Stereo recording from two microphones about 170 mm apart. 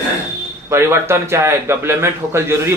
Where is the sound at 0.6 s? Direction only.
15° right (ahead or behind).